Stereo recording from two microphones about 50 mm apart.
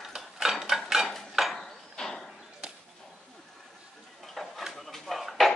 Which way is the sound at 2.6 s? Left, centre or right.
Centre.